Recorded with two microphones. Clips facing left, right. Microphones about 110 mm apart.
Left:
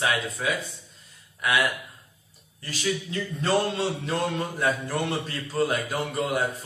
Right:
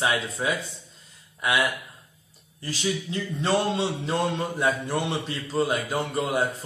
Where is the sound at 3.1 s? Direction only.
25° right (ahead or behind).